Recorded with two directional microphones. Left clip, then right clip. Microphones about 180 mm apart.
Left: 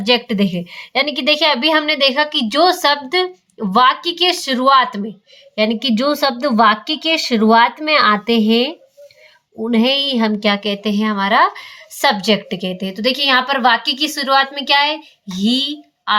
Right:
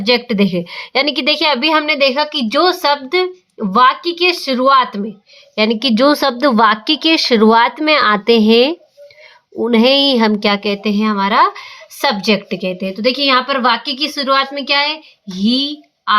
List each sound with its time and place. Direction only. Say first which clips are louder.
0.0 s a woman's voice: right 2 dB; 15° right (ahead or behind)
5.5 s a woman's voice: right 3 dB; 30° right (ahead or behind); by 16.1 s centre (ahead or behind)